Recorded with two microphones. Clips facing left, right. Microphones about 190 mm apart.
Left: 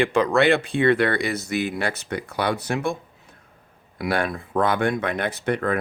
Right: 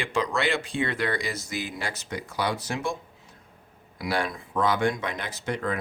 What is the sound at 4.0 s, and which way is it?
Speech, 60° left (ahead or behind).